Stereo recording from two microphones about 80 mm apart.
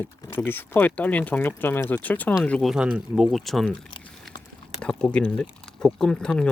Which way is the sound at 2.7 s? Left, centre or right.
Centre.